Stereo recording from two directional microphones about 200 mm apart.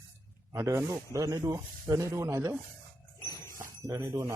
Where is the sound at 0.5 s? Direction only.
15° right (ahead or behind).